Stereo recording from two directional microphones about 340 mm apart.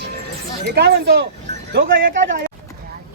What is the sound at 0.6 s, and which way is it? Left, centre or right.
Speech, right.